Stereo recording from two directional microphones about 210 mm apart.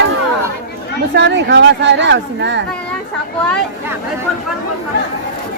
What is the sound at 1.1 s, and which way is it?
Speech, 55° right (ahead or behind).